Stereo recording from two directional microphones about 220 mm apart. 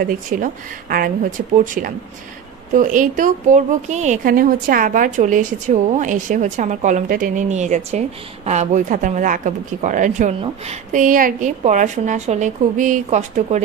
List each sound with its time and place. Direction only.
0.0 s a woman's voice: 40° right (ahead or behind)